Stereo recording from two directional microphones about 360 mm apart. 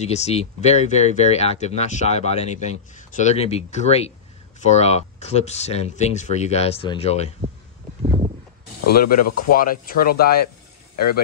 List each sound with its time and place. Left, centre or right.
0.0 s speech: centre
8.0 s a sound: centre
8.9 s speech: left